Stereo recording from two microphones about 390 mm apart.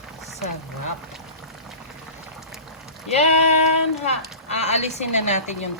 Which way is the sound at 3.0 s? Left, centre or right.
Centre.